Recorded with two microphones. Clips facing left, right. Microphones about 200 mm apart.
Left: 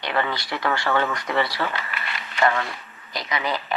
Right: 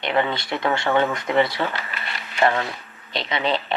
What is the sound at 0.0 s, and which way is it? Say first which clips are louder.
Speech: right 3 dB; 20° right (ahead or behind).